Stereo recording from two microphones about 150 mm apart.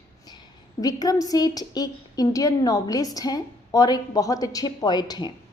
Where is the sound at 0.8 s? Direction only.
25° left (ahead or behind).